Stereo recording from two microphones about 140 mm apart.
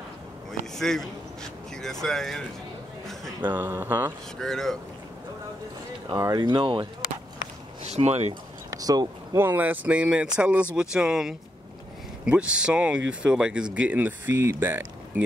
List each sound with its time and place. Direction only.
0.5 s speech: 5° left (ahead or behind)
3.4 s speech: 15° right (ahead or behind)
4.4 s speech: 5° left (ahead or behind)
6.0 s speech: 25° right (ahead or behind)
7.8 s speech: 50° right (ahead or behind)
8.6 s a sound: 25° right (ahead or behind)
9.4 s speech: 15° right (ahead or behind)